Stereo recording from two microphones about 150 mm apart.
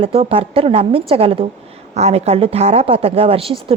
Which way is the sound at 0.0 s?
45° right (ahead or behind).